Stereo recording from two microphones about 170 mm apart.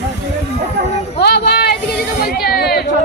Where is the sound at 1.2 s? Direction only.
75° left (ahead or behind).